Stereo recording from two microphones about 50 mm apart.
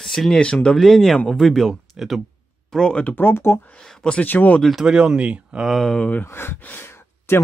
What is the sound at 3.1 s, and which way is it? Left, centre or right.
Speech, left.